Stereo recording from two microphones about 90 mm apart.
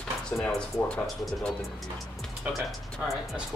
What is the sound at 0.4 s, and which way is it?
Speech, 10° left (ahead or behind).